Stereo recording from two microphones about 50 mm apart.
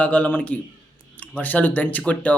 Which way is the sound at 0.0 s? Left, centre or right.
Left.